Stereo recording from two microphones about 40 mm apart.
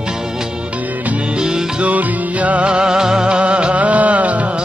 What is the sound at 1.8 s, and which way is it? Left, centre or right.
Music, right.